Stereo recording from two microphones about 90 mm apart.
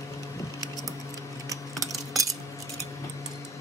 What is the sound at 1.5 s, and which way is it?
Cutlery, 40° right (ahead or behind).